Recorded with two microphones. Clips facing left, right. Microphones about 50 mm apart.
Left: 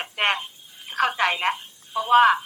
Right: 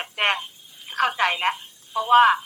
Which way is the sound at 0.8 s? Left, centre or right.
Centre.